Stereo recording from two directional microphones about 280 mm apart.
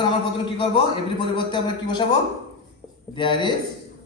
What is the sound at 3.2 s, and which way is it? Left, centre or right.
Speech, centre.